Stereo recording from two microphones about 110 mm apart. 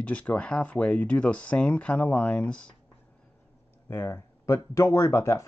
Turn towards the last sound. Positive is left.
turn(degrees=25)  # may be behind; listen again after turning